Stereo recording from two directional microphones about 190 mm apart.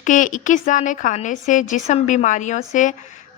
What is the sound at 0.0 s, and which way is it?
A woman's voice, 40° left (ahead or behind).